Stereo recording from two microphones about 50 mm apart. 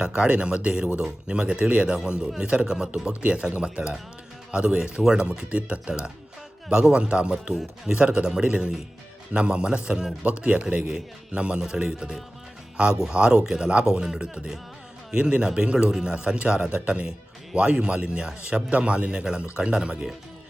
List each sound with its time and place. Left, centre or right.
0.0 s speech: right
5.5 s speech: right; by 7.9 s centre
7.9 s speech: right
14.0 s speech: centre